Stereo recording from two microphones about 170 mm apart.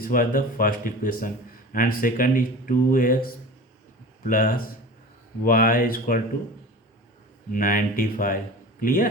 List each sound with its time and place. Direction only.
0.0 s speech: 55° left (ahead or behind)
7.5 s speech: 55° left (ahead or behind)